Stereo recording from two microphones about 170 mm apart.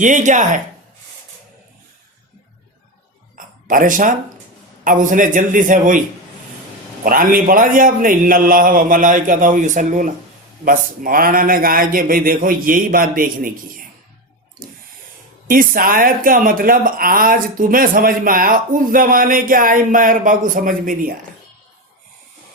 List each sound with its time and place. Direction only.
0.0 s a man's voice: 45° right (ahead or behind)
3.3 s a sound: 55° right (ahead or behind)
4.8 s a man's voice: 50° right (ahead or behind)
7.0 s a man's voice: 55° right (ahead or behind)
15.4 s speech: 55° right (ahead or behind)